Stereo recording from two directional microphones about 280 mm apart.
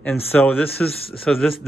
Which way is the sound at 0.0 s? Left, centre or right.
Centre.